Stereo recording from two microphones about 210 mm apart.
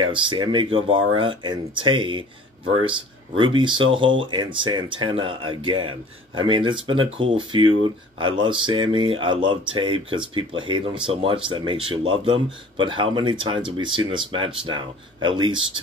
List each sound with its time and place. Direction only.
0.0 s speech: 25° right (ahead or behind)
3.3 s speech: 20° right (ahead or behind)